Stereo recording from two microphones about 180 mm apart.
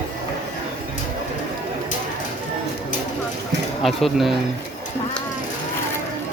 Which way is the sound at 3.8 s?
Centre (ahead or behind).